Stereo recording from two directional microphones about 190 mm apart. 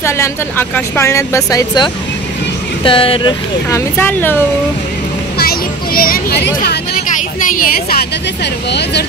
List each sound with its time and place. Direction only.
0.0 s speech: 10° left (ahead or behind)
2.8 s speech: 30° left (ahead or behind)
3.7 s speech: 10° left (ahead or behind)
5.4 s music: 50° left (ahead or behind)
7.3 s a woman's voice: 45° left (ahead or behind)